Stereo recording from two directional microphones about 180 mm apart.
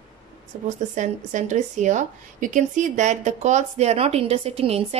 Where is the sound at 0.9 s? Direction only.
40° right (ahead or behind).